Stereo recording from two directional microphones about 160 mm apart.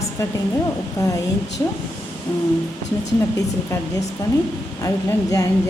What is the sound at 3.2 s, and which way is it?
Speech, 20° left (ahead or behind).